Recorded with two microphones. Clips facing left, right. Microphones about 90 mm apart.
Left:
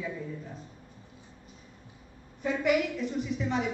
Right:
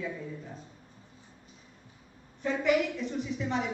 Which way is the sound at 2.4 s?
5° left (ahead or behind).